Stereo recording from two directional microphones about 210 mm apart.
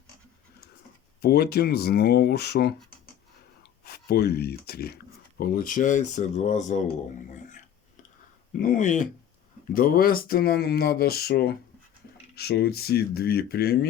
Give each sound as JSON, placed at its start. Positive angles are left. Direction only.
{"t": 1.2, "sound": "speech", "side_deg": 50}
{"t": 3.8, "sound": "speech", "side_deg": 50}
{"t": 8.6, "sound": "speech", "side_deg": 35}